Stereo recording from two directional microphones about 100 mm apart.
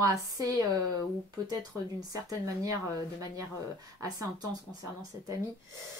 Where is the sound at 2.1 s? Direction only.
35° right (ahead or behind).